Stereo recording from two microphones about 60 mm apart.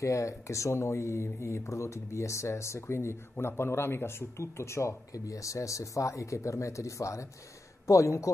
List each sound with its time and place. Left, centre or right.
0.0 s speech: left